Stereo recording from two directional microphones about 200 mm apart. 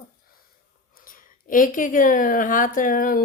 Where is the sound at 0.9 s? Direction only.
45° left (ahead or behind).